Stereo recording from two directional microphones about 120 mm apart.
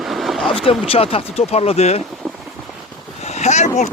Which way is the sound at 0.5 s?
50° left (ahead or behind).